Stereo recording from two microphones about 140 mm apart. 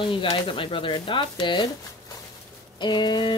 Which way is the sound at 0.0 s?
40° left (ahead or behind).